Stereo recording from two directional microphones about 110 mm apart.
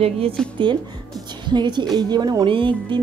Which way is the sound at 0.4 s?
5° left (ahead or behind).